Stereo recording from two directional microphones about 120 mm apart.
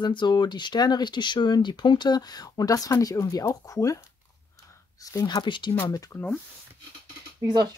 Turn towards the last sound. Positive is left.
turn(degrees=-35)  # may be behind; listen again after turning